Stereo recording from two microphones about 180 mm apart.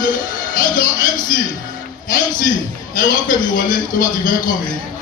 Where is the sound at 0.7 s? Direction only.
50° left (ahead or behind).